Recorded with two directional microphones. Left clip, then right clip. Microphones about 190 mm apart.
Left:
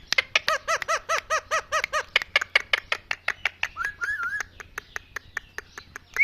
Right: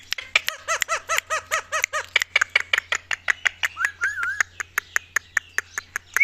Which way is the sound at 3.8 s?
5° left (ahead or behind).